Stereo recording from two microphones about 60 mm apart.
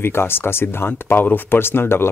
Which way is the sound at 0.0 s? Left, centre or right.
Left.